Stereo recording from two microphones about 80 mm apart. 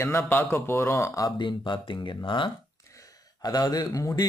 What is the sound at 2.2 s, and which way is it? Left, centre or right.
Speech, left.